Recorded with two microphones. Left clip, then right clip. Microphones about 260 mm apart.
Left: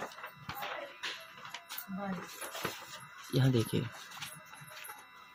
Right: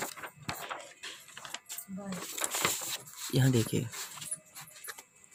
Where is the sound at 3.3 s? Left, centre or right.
Right.